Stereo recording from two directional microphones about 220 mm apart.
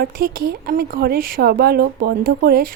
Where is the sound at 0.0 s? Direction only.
40° right (ahead or behind).